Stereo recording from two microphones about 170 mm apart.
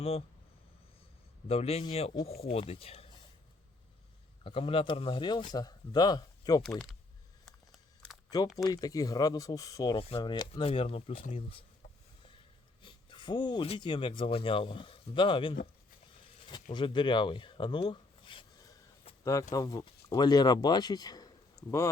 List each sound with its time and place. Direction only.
0.0 s speech: 35° left (ahead or behind)
1.5 s speech: 35° left (ahead or behind)
4.4 s speech: 30° left (ahead or behind)
6.6 s speech: centre (ahead or behind)
7.4 s a sound: centre (ahead or behind)
8.5 s speech: 20° left (ahead or behind)
12.8 s speech: 30° left (ahead or behind)
16.7 s speech: 30° left (ahead or behind)